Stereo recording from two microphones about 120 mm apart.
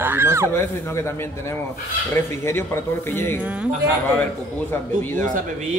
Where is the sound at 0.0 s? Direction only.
20° right (ahead or behind).